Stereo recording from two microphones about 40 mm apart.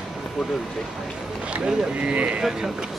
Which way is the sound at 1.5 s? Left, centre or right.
Right.